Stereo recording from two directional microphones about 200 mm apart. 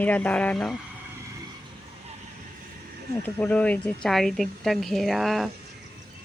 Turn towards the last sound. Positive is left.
turn(degrees=0)  # may be behind; listen again after turning